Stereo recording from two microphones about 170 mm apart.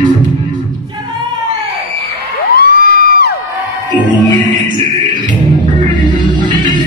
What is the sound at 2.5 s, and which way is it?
Music, 65° left (ahead or behind).